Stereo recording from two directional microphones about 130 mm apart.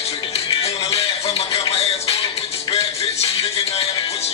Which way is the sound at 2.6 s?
50° left (ahead or behind).